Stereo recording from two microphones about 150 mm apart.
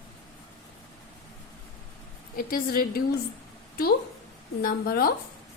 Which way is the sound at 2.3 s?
75° left (ahead or behind).